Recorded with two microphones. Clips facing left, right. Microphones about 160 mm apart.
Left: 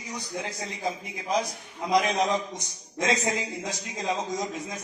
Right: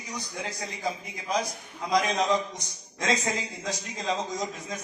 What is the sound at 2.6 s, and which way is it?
Speech, 20° left (ahead or behind).